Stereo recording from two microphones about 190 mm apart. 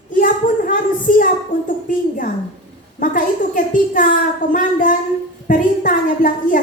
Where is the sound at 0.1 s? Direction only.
45° left (ahead or behind).